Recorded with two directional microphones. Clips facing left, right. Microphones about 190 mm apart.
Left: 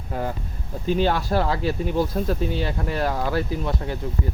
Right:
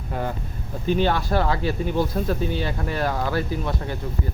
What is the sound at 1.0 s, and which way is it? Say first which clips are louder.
Speech: even; 30° left (ahead or behind).